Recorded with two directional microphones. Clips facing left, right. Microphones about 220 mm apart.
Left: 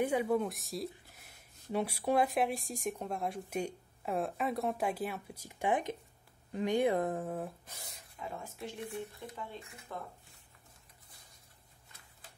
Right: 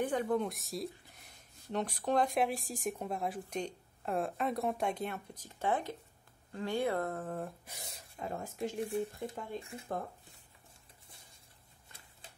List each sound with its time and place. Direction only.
0.0 s speech: 10° left (ahead or behind)
7.6 s speech: 15° right (ahead or behind)
8.2 s speech: 45° right (ahead or behind)
8.7 s speech: 30° right (ahead or behind)